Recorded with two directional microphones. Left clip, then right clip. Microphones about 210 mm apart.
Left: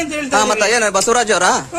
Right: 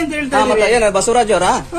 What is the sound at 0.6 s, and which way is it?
A man's voice, 40° left (ahead or behind).